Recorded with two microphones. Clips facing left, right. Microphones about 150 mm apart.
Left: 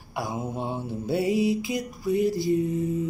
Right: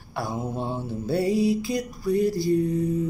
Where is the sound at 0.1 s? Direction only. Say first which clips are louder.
Right 1 dB; 15° left (ahead or behind).